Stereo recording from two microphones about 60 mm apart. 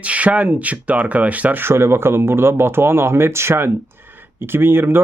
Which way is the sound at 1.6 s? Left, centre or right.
Right.